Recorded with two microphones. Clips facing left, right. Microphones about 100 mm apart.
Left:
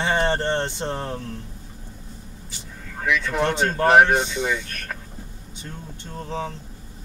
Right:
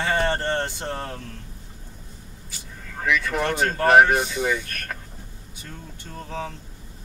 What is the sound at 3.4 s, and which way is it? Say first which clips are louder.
Speech: left 4 dB; 20° left (ahead or behind).